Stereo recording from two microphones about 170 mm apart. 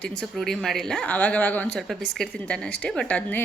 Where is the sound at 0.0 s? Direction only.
5° left (ahead or behind).